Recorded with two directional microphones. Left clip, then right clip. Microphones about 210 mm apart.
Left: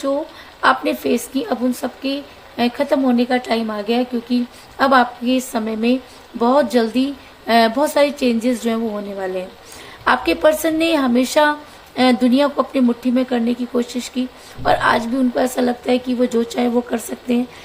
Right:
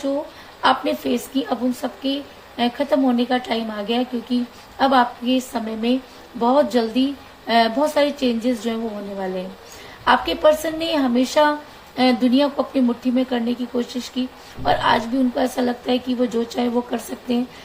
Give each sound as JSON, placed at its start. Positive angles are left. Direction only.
{"t": 0.6, "sound": "a woman's voice", "side_deg": 45}
{"t": 10.0, "sound": "a woman's voice", "side_deg": 45}